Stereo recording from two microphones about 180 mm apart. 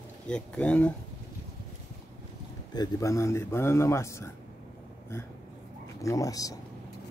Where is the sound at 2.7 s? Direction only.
20° left (ahead or behind).